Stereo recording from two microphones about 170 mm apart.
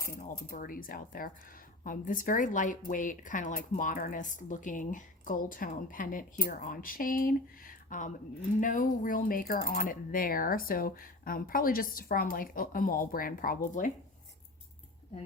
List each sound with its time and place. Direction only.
0.1 s a woman's voice: 50° left (ahead or behind)